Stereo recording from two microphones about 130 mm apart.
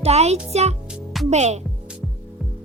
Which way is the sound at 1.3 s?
60° right (ahead or behind).